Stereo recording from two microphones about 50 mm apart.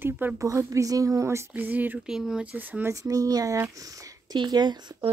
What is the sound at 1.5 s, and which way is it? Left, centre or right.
Speech, right.